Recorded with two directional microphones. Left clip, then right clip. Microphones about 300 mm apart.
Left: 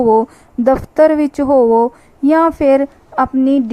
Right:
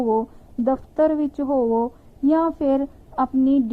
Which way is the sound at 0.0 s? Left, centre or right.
Left.